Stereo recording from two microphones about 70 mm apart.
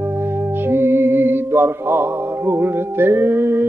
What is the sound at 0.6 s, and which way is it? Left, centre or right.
Music, right.